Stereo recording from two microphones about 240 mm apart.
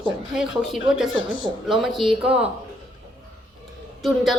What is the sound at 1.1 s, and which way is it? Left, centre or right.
Speech, left.